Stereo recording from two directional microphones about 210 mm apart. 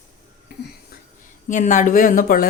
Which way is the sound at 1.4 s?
40° left (ahead or behind).